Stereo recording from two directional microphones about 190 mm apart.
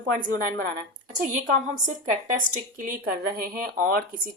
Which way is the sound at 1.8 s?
40° right (ahead or behind).